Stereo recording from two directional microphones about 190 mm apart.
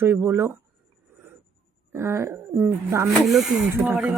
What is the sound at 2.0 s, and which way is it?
Speech, 15° right (ahead or behind).